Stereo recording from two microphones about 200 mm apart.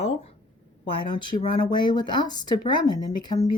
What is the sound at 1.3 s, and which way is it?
Speech, 45° left (ahead or behind).